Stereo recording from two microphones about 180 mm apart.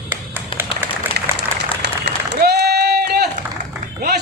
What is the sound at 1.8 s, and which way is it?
Run, 65° right (ahead or behind).